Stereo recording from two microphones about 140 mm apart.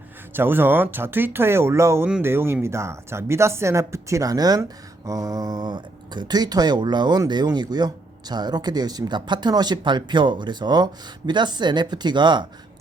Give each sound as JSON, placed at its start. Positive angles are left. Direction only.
{"t": 0.3, "sound": "speech", "side_deg": -15}